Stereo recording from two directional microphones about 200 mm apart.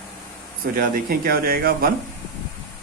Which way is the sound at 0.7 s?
50° right (ahead or behind).